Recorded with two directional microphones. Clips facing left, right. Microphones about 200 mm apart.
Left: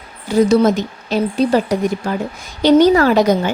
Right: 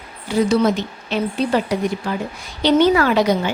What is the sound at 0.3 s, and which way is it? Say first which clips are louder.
A woman's voice: left 4 dB; 45° left (ahead or behind).